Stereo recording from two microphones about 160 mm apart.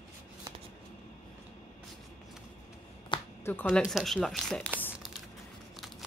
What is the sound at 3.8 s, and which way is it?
Speech, centre (ahead or behind).